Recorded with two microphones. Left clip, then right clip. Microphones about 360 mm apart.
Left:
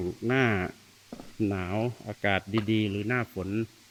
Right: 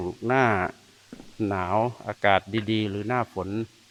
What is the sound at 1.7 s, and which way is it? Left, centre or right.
Speech, right.